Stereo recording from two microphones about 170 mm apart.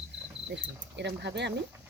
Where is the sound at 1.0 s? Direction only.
90° right.